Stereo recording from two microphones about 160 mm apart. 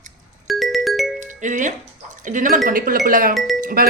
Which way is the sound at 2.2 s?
55° right (ahead or behind).